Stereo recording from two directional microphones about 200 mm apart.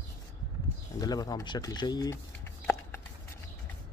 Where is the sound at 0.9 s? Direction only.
20° left (ahead or behind).